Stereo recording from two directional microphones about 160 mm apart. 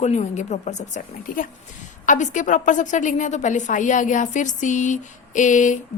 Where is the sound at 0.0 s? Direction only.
45° left (ahead or behind).